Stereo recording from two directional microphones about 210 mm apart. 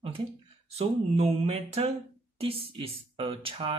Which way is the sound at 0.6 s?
30° right (ahead or behind).